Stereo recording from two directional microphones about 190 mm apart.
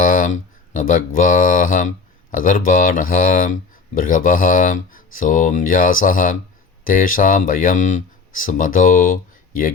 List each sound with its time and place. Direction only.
0.0 s speech: 45° left (ahead or behind)